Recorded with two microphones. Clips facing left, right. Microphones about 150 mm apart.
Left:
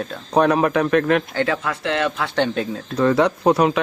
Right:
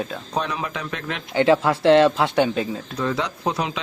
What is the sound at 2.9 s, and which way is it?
Speech, 60° left (ahead or behind).